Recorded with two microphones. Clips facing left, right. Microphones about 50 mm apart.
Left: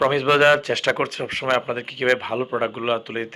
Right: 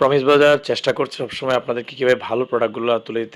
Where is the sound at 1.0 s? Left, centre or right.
Left.